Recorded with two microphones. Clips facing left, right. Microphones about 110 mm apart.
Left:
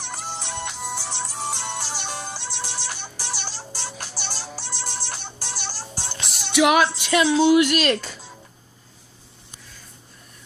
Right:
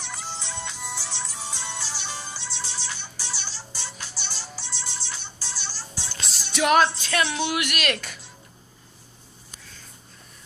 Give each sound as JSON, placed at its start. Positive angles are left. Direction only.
{"t": 0.0, "sound": "music", "side_deg": 55}
{"t": 6.7, "sound": "music", "side_deg": 10}
{"t": 7.2, "sound": "speech", "side_deg": 30}